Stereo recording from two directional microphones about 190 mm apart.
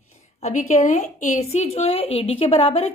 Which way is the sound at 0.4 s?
40° left (ahead or behind).